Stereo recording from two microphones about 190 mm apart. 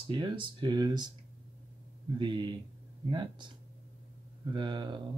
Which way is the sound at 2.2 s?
25° right (ahead or behind).